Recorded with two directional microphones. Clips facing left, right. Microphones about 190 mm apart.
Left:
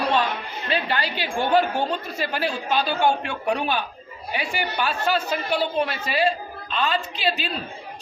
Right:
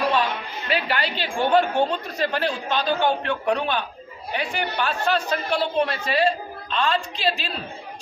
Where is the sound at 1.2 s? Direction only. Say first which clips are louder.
Right 1 dB; 5° left (ahead or behind).